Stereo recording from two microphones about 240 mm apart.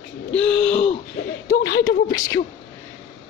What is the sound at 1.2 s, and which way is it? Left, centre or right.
Speech, left.